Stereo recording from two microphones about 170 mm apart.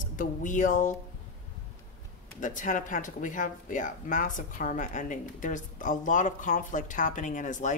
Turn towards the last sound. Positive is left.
turn(degrees=50)  # may be behind; listen again after turning